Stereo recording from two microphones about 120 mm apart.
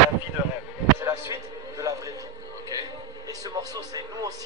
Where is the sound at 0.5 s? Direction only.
20° right (ahead or behind).